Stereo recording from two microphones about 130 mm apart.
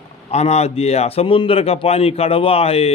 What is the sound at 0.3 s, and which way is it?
A man's voice, 55° left (ahead or behind).